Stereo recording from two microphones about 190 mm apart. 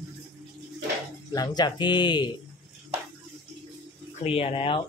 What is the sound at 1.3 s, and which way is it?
Speech, 20° left (ahead or behind).